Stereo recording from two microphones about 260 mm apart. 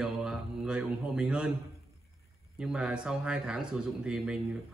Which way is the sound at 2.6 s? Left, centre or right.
Centre.